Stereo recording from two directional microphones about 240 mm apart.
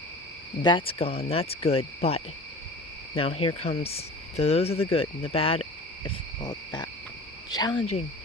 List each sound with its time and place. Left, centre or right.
0.6 s cricket: left
3.2 s speech: left